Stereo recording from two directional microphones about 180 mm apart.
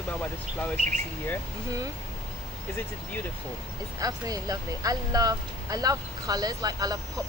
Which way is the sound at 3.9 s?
20° right (ahead or behind).